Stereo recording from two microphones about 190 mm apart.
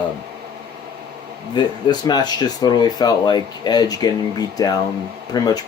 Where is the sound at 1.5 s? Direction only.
20° left (ahead or behind).